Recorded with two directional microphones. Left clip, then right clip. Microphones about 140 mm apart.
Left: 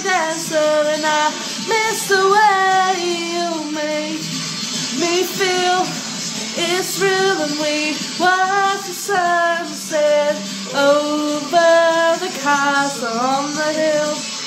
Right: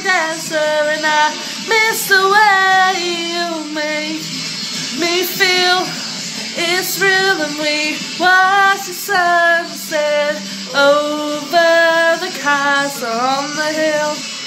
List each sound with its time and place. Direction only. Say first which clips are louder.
0.0 s female singing: right 2 dB; centre (ahead or behind)
5.0 s music: right 3 dB; centre (ahead or behind)
11.5 s female singing: right 2 dB; centre (ahead or behind)